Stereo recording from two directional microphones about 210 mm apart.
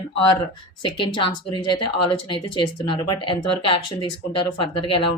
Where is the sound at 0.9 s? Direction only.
20° left (ahead or behind).